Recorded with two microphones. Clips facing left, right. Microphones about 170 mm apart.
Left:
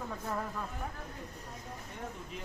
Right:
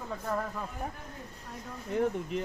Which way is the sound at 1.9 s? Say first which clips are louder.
Right 16 dB; 90° right.